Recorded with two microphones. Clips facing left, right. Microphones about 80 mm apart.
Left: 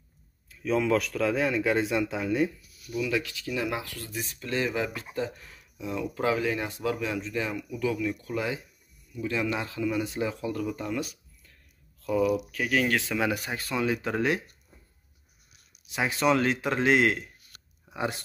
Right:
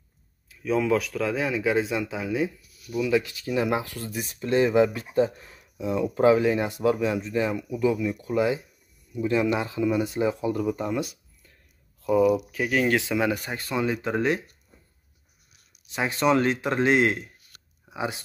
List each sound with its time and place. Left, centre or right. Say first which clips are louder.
0.5 s speech: right 2 dB; centre
3.3 s speech: right 6 dB; right; by 13.3 s centre
13.3 s speech: right 2 dB; centre
15.9 s speech: right 2 dB; centre